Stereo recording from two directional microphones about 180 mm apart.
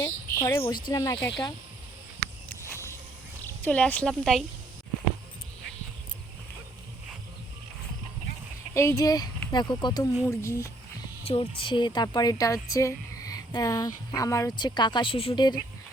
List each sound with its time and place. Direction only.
0.0 s speech: 15° left (ahead or behind)
2.5 s a sound: 15° left (ahead or behind)
3.4 s speech: 10° left (ahead or behind)
8.7 s speech: 15° left (ahead or behind)
11.3 s speech: 30° left (ahead or behind)